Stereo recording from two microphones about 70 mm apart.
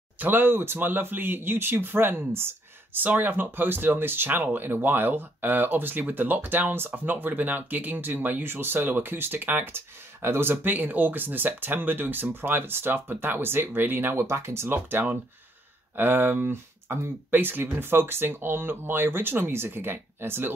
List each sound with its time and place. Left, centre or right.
0.2 s speech: right